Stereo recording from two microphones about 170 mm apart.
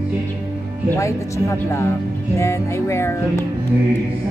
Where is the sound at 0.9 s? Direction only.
15° left (ahead or behind).